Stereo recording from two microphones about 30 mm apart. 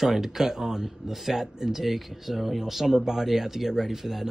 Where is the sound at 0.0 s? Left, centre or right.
Centre.